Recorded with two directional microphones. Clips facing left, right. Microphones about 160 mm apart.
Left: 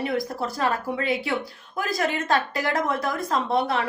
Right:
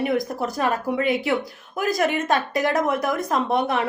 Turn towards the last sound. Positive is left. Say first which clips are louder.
# right 2 dB
turn(degrees=-20)  # may be behind; listen again after turning